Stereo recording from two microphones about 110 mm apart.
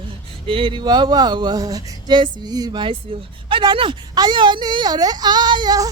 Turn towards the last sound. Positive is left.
turn(degrees=-35)  # may be behind; listen again after turning